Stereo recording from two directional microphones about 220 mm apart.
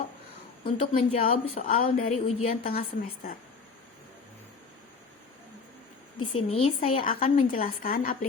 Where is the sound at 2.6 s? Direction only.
40° left (ahead or behind).